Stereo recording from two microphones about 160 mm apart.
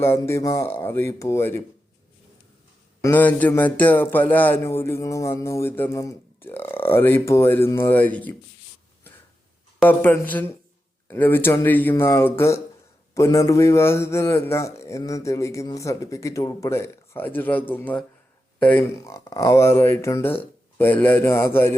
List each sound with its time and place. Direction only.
0.0 s a man's voice: 15° left (ahead or behind)
3.0 s a man's voice: 10° left (ahead or behind)
10.0 s a man's voice: 10° left (ahead or behind)